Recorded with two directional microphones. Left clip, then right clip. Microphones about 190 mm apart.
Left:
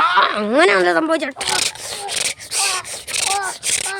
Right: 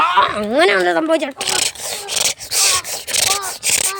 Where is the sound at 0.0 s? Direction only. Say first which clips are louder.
Right 1 dB; centre (ahead or behind).